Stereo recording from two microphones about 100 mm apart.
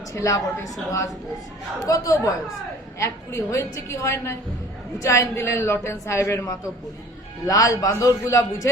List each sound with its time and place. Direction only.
0.1 s a man's voice: 35° left (ahead or behind)